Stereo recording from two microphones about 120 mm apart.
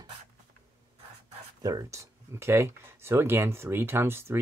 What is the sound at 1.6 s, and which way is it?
Speech, 30° right (ahead or behind).